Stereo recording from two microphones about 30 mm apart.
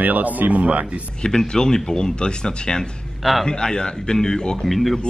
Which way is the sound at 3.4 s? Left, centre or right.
Left.